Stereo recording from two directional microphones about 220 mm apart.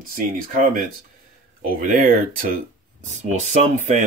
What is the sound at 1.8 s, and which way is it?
Speech, 40° right (ahead or behind).